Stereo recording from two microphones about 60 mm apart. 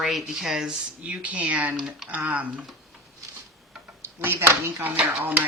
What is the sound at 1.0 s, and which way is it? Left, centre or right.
Speech, right.